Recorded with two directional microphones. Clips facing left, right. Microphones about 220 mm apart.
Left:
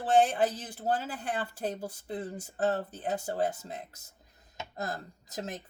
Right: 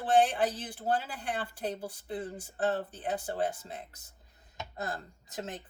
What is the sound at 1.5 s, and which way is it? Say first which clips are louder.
Speech: left 1 dB; 40° left (ahead or behind).